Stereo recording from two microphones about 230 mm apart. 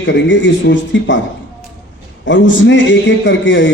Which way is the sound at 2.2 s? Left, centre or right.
Left.